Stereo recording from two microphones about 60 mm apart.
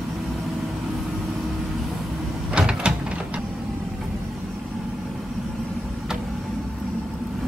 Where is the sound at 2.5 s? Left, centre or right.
Centre.